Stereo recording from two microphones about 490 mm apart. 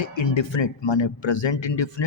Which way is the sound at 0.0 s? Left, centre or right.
Left.